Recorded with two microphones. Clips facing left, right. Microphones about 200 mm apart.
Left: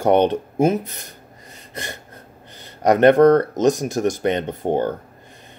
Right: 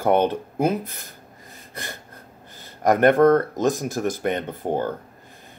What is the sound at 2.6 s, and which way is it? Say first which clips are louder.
Speech: left 3 dB; 20° left (ahead or behind).